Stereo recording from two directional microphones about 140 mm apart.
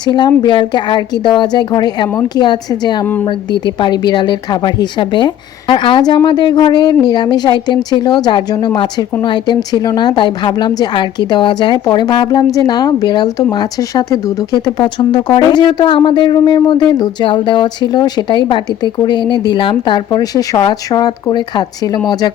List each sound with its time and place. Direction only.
0.0 s speech: 30° left (ahead or behind)